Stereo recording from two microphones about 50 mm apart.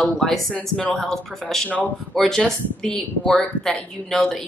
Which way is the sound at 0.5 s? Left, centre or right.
Left.